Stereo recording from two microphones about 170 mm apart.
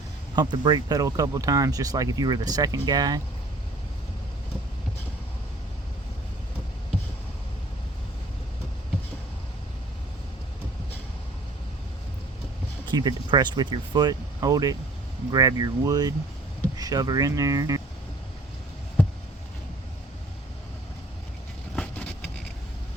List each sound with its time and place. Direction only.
0.3 s speech: 25° right (ahead or behind)
12.9 s speech: 25° right (ahead or behind)
21.8 s vehicle: 10° left (ahead or behind)